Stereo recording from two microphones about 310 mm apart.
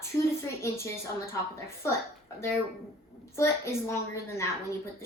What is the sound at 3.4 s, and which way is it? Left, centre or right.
A woman's voice, centre.